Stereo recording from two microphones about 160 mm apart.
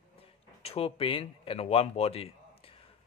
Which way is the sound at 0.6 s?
40° left (ahead or behind).